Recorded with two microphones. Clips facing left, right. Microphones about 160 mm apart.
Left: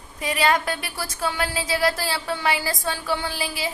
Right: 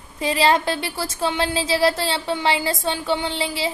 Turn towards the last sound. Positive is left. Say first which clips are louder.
# right 4 dB
turn(degrees=-25)  # may be behind; listen again after turning